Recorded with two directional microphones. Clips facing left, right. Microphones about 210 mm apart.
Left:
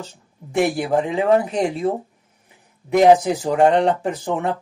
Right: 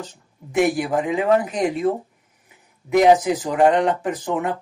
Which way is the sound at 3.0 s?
30° left (ahead or behind).